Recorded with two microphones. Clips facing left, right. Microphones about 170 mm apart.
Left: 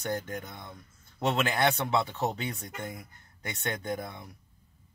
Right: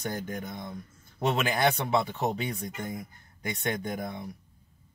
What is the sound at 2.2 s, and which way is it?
Speech, 15° right (ahead or behind).